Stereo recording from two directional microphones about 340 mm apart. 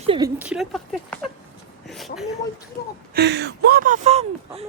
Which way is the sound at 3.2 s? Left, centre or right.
Right.